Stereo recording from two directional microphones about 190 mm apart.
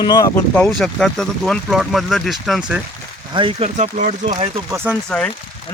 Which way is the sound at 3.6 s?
40° right (ahead or behind).